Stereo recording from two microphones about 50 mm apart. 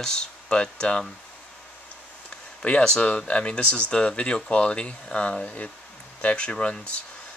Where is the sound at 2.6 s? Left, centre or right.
Left.